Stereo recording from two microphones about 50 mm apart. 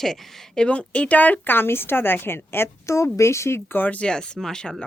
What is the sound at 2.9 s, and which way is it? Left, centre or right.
Speech, left.